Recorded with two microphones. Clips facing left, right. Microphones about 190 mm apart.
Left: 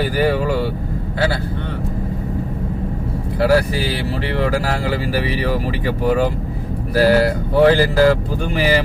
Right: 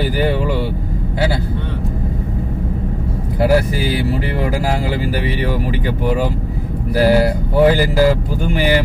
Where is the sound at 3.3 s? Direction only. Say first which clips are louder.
Right 1 dB; 20° right (ahead or behind).